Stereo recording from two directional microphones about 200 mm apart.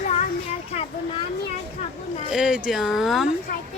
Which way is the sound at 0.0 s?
40° left (ahead or behind).